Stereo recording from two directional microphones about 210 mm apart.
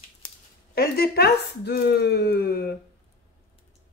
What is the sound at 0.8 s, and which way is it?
Speech, 50° left (ahead or behind).